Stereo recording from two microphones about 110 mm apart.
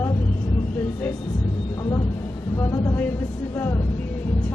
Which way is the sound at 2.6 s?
30° left (ahead or behind).